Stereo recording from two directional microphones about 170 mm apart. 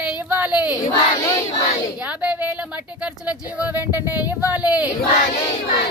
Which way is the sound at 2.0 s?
5° right (ahead or behind).